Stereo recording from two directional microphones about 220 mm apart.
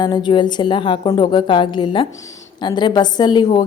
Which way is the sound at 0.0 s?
20° left (ahead or behind).